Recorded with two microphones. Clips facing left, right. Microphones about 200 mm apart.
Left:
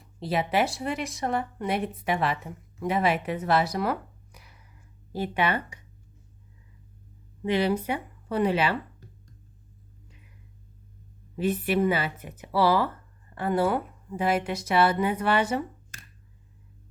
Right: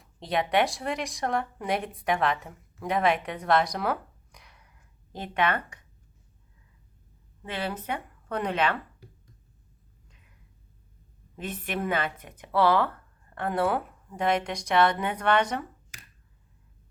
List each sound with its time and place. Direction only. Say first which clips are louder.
0.0 s speech: left 1 dB; centre (ahead or behind)
7.4 s speech: left 8 dB; 15° left (ahead or behind)
11.3 s a woman's voice: left 8 dB; 10° left (ahead or behind)